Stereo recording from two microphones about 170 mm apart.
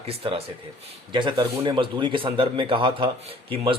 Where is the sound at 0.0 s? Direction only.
35° right (ahead or behind).